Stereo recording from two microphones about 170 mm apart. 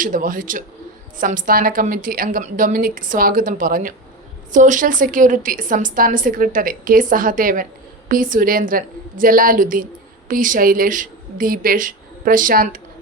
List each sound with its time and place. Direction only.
0.0 s a woman's voice: 50° right (ahead or behind)